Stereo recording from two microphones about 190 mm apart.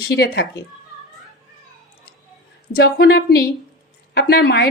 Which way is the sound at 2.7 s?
55° left (ahead or behind).